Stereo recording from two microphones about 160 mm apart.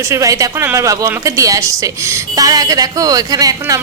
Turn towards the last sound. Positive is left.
turn(degrees=-20)  # may be behind; listen again after turning